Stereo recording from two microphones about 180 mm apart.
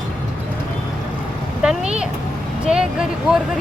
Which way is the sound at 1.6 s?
5° right (ahead or behind).